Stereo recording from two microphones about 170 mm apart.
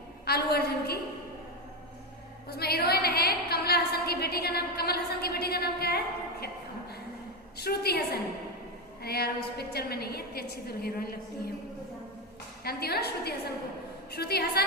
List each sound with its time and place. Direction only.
0.3 s a woman's voice: 65° left (ahead or behind)
2.5 s a woman's voice: 65° left (ahead or behind)
7.6 s a woman's voice: 65° left (ahead or behind)
12.6 s a woman's voice: 70° left (ahead or behind)